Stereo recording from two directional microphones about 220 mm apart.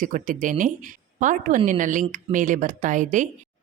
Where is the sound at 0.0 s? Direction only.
35° right (ahead or behind).